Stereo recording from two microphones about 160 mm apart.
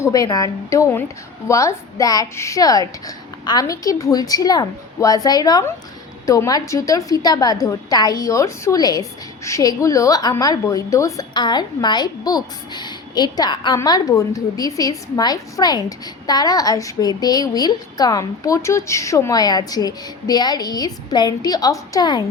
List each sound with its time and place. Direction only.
0.0 s a woman's voice: 20° left (ahead or behind)